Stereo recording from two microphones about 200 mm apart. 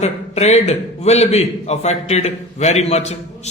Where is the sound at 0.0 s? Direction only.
35° left (ahead or behind).